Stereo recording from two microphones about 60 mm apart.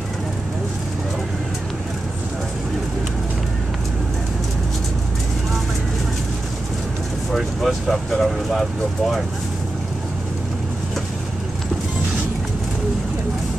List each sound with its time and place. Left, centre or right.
7.3 s speech: centre